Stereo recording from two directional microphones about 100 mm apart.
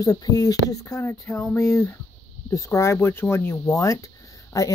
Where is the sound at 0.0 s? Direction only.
35° left (ahead or behind).